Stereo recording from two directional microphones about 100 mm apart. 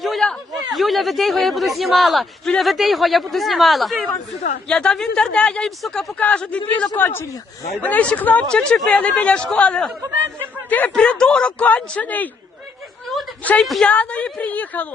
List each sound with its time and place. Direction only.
0.0 s speech: 5° left (ahead or behind)
13.4 s speech: 15° left (ahead or behind)